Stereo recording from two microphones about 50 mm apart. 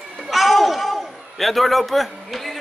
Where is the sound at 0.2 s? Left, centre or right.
Centre.